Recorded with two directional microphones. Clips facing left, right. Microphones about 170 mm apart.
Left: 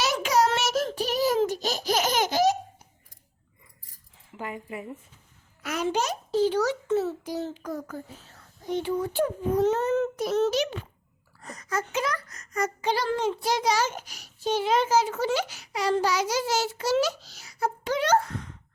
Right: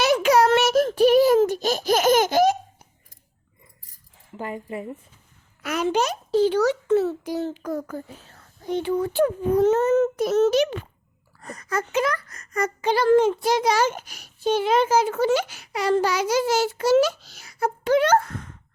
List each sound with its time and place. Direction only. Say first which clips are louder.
0.0 s a sound: right 6 dB; 60° right (ahead or behind)
4.4 s speech: right 4 dB; 35° right (ahead or behind)
5.6 s a child's voice: right 4 dB; 70° right (ahead or behind); by 18.5 s 50° right (ahead or behind)